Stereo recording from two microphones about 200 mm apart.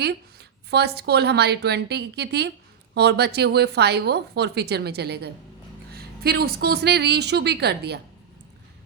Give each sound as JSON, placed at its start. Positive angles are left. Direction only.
{"t": 0.0, "sound": "a woman's voice", "side_deg": -55}